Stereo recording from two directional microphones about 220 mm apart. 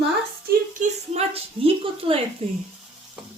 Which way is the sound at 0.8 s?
30° right (ahead or behind).